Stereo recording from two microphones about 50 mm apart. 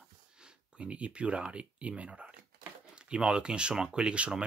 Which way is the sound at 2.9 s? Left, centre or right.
Centre.